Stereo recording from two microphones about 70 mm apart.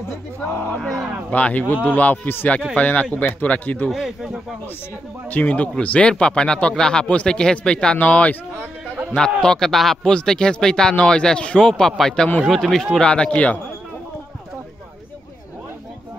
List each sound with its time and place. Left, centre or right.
0.7 s speech: centre
1.3 s a man's voice: left
3.9 s speech: centre
5.3 s a man's voice: centre